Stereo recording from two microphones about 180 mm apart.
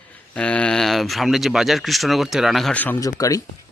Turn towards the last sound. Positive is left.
turn(degrees=20)  # may be behind; listen again after turning